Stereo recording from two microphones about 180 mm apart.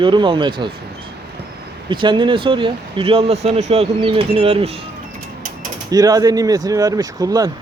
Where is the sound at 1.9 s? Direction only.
25° right (ahead or behind).